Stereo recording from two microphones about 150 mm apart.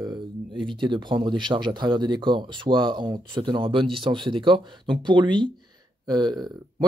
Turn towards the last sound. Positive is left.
turn(degrees=-30)  # may be behind; listen again after turning